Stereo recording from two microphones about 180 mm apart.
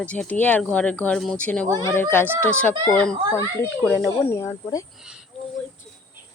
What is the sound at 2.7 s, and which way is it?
Speech, 25° right (ahead or behind).